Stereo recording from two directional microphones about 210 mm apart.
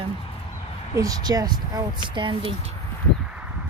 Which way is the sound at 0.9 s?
15° right (ahead or behind).